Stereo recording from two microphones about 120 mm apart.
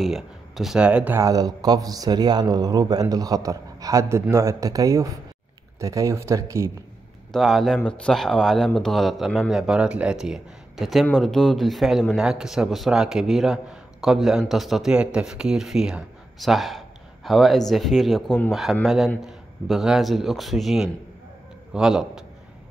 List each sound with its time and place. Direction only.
0.0 s speech: centre (ahead or behind)
1.1 s speech: 30° right (ahead or behind)
7.3 s speech: centre (ahead or behind)